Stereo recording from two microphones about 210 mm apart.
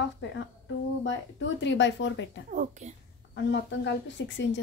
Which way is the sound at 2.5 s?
35° right (ahead or behind).